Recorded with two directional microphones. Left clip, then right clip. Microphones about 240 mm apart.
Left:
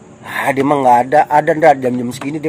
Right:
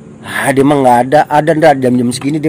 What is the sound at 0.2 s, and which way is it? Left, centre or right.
A man's voice, right.